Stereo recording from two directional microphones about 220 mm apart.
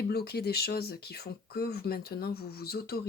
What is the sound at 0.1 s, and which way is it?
Speech, 45° left (ahead or behind).